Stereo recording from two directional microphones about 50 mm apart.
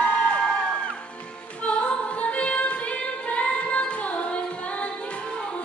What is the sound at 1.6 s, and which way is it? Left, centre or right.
Singing, left.